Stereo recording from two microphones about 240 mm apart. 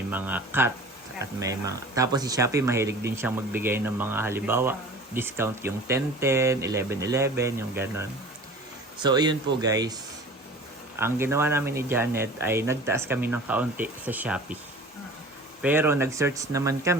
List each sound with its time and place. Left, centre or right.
0.1 s speech: centre
15.6 s speech: centre